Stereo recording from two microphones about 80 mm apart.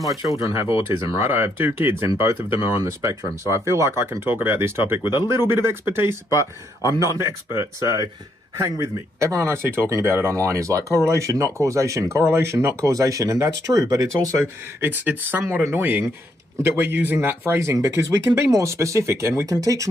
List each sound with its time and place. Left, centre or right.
0.4 s speech: right
7.0 s speech: right
14.4 s speech: right